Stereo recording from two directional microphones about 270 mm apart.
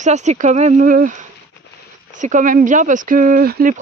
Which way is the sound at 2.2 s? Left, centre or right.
Right.